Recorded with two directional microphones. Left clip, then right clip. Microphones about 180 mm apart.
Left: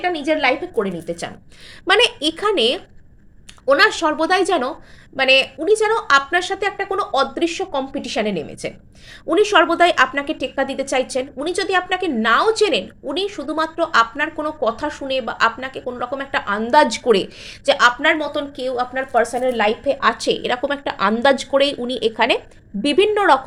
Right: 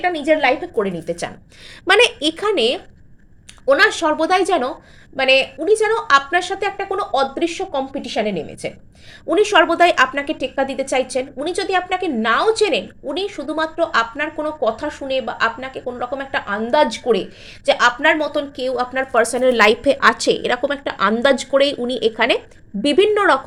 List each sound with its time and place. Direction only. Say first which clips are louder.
0.0 s a woman's voice: right 2 dB; 5° right (ahead or behind); by 17.2 s 20° left (ahead or behind)
17.7 s speech: even; centre (ahead or behind); by 20.0 s 35° right (ahead or behind)
20.0 s a woman's voice: right 3 dB; 20° right (ahead or behind); by 23.5 s centre (ahead or behind)